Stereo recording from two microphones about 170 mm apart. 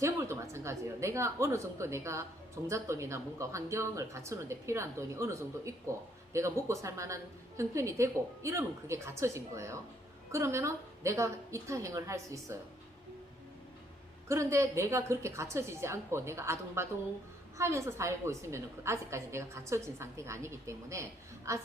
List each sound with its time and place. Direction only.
0.0 s a woman's voice: 15° right (ahead or behind)
14.3 s a woman's voice: 15° right (ahead or behind)